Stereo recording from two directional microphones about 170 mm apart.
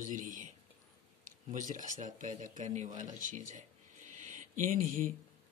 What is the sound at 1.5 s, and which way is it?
Speech, 50° right (ahead or behind).